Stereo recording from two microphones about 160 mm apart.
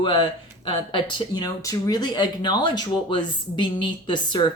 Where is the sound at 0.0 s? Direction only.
30° left (ahead or behind).